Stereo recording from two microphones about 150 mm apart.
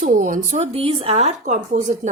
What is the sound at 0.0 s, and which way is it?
Speech, 65° right (ahead or behind).